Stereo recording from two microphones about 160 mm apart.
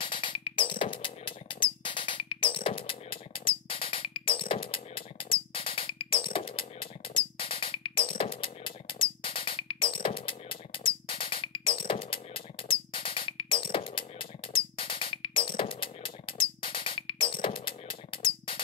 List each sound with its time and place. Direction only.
0.0 s music: 30° left (ahead or behind)